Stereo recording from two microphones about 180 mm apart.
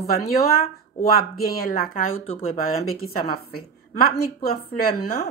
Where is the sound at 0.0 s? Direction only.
55° left (ahead or behind).